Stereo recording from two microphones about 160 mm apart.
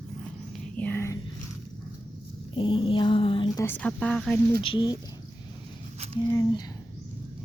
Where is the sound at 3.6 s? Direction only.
10° left (ahead or behind).